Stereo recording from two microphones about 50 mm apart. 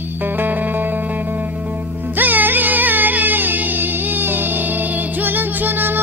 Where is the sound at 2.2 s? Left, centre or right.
Right.